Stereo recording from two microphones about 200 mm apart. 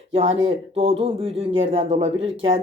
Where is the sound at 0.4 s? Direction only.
30° right (ahead or behind).